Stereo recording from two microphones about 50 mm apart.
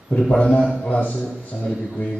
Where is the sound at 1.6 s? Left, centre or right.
Centre.